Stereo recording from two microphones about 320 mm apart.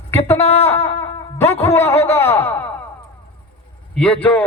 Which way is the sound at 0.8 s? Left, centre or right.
Centre.